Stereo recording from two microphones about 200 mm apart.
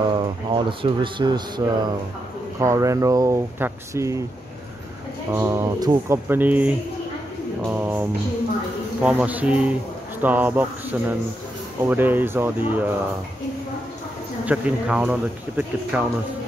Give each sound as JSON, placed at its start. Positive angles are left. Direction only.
{"t": 0.1, "sound": "speech", "side_deg": -25}
{"t": 5.3, "sound": "speech", "side_deg": -10}
{"t": 14.4, "sound": "speech", "side_deg": -5}